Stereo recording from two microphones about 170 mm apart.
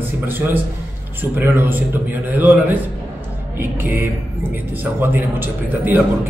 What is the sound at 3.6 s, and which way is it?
A man's voice, 10° right (ahead or behind).